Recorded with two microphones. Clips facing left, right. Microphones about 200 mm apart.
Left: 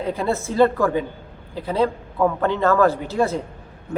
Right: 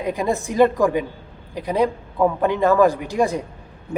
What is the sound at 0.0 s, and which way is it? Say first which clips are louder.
A man's voice: right 1 dB; 15° right (ahead or behind).